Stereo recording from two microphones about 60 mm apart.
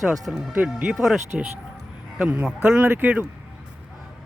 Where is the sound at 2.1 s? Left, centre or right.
Right.